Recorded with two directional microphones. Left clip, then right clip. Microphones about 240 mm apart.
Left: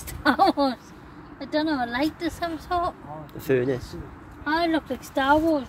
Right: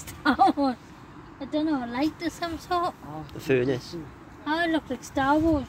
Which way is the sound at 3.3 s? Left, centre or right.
Centre.